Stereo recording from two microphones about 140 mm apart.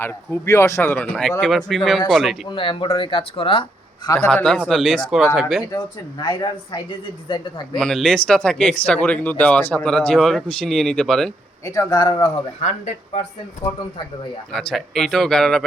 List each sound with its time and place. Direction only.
0.0 s speech: 20° left (ahead or behind); by 2.3 s centre (ahead or behind)
2.5 s speech: 35° left (ahead or behind)
4.3 s speech: 10° left (ahead or behind)
5.7 s speech: 30° left (ahead or behind)
7.8 s speech: 5° left (ahead or behind)
11.6 s speech: 20° left (ahead or behind)
12.6 s speech: 55° left (ahead or behind)
14.5 s speech: 5° left (ahead or behind)